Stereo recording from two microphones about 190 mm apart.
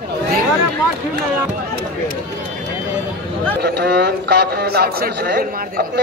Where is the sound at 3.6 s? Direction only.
60° right (ahead or behind).